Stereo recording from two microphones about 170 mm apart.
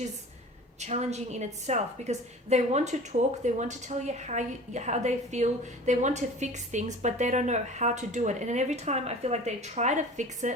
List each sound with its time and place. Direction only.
0.8 s a woman's voice: 40° right (ahead or behind)